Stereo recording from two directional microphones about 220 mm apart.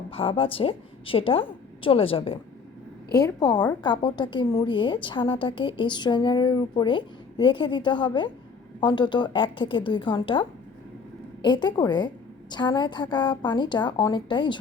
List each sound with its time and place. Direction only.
0.1 s a woman's voice: 25° left (ahead or behind)
11.4 s a woman's voice: 20° left (ahead or behind)